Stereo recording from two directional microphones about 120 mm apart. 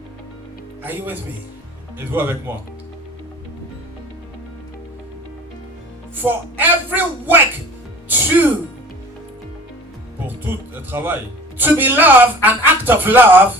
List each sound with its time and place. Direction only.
0.8 s a woman's voice: 15° right (ahead or behind)
6.1 s a woman's voice: 15° right (ahead or behind)
10.5 s a woman's voice: 20° right (ahead or behind)